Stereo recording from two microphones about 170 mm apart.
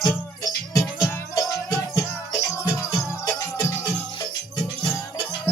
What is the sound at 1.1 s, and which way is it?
Music, 20° left (ahead or behind).